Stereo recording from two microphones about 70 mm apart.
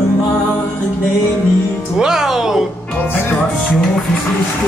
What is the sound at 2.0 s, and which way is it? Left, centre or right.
Speech, centre.